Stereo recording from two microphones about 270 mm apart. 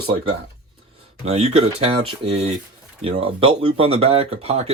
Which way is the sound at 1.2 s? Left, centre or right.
Right.